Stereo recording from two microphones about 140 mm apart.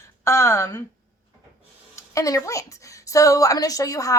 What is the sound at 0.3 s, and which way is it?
Speech, 20° left (ahead or behind).